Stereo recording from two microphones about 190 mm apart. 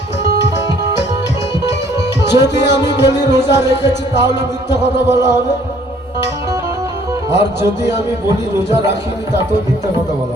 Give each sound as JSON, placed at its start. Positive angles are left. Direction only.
{"t": 2.2, "sound": "music", "side_deg": 65}
{"t": 3.6, "sound": "music", "side_deg": -15}
{"t": 4.1, "sound": "music", "side_deg": 70}
{"t": 4.7, "sound": "music", "side_deg": -15}
{"t": 7.6, "sound": "music", "side_deg": -15}